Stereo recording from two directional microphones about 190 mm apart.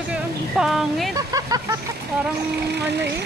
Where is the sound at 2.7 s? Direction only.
60° right (ahead or behind).